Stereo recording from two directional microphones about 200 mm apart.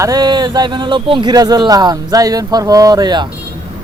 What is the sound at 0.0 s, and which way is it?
Speech, 20° right (ahead or behind).